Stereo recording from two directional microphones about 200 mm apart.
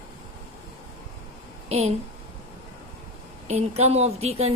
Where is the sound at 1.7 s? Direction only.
30° right (ahead or behind).